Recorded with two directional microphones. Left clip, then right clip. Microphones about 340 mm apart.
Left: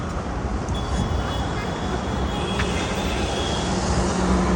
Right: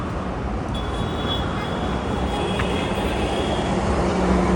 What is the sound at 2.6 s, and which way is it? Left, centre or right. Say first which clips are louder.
Vehicle: right 2 dB; right.